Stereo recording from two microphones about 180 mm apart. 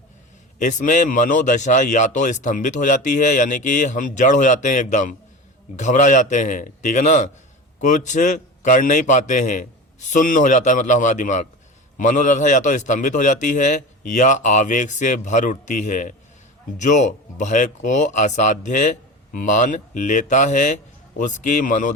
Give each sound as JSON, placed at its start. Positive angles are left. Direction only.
{"t": 0.6, "sound": "speech", "side_deg": 45}